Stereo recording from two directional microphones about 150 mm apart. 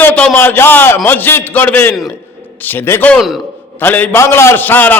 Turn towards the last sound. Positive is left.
turn(degrees=10)  # may be behind; listen again after turning